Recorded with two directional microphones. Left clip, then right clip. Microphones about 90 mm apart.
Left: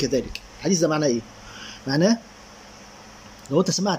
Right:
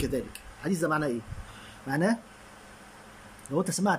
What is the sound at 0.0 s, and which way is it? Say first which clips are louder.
Speech: left 8 dB; 20° left (ahead or behind).